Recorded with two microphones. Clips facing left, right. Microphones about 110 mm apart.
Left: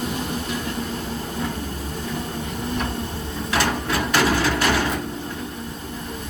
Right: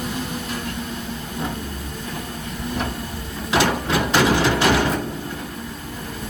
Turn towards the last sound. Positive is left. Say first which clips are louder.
# right 3 dB
turn(degrees=-20)  # may be behind; listen again after turning